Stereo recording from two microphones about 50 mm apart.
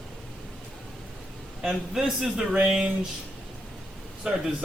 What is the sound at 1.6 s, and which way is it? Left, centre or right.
A man's voice, centre.